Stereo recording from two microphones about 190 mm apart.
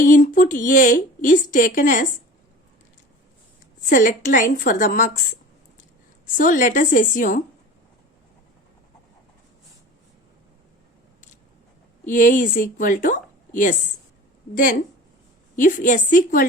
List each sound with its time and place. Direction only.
0.0 s a woman's voice: 45° left (ahead or behind)
3.8 s a woman's voice: 45° left (ahead or behind)
6.2 s a woman's voice: 45° left (ahead or behind)
12.0 s a woman's voice: 45° left (ahead or behind)